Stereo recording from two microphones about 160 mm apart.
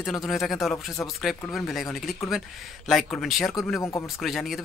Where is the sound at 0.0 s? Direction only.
Centre (ahead or behind).